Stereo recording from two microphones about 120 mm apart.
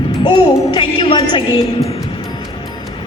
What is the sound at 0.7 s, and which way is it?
Speech, 45° left (ahead or behind).